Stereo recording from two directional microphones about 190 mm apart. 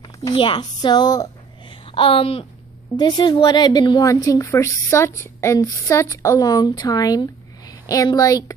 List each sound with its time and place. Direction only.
0.2 s a woman's voice: 25° left (ahead or behind)